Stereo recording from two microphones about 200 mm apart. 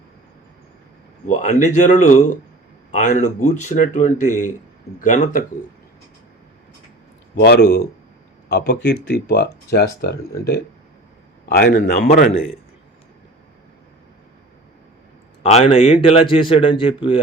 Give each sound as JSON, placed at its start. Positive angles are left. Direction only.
{"t": 1.3, "sound": "speech", "side_deg": 40}
{"t": 7.3, "sound": "speech", "side_deg": 55}
{"t": 11.4, "sound": "speech", "side_deg": 55}
{"t": 15.4, "sound": "speech", "side_deg": 30}